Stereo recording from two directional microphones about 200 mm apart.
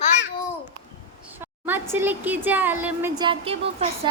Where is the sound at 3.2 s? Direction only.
25° right (ahead or behind).